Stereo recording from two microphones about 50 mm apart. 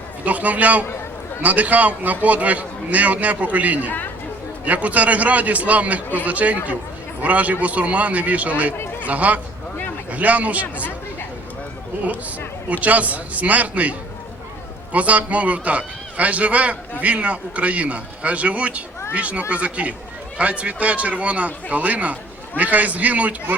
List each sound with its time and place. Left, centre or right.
0.3 s a man's voice: right
12.8 s a man's voice: right
14.9 s speech: right